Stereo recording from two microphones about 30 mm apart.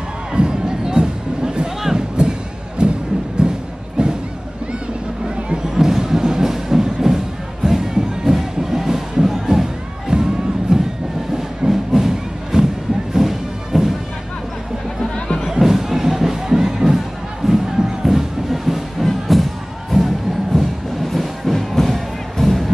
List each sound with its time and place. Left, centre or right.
0.3 s music: right
3.4 s a sound: right
5.8 s music: centre
15.5 s music: centre
18.0 s a sound: centre
19.0 s music: centre
20.5 s music: centre